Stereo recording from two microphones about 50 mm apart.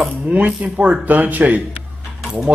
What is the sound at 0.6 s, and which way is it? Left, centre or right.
Speech, right.